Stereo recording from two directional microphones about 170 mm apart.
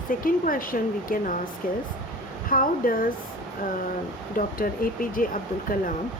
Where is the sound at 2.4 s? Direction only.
55° left (ahead or behind).